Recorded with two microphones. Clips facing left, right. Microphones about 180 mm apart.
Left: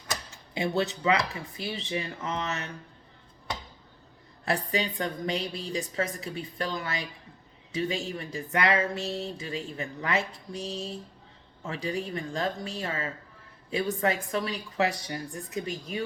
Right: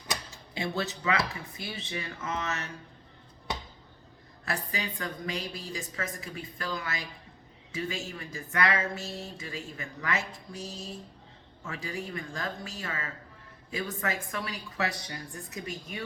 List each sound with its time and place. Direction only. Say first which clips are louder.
1.5 s speech: left 7 dB; 30° left (ahead or behind)
4.4 s speech: left 6 dB; 35° left (ahead or behind)